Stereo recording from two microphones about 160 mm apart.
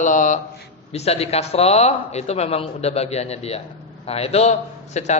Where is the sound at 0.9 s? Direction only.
40° left (ahead or behind).